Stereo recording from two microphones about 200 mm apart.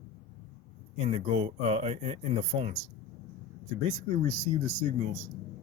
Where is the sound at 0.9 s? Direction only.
30° right (ahead or behind).